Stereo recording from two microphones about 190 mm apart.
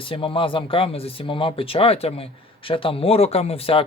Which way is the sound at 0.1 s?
25° left (ahead or behind).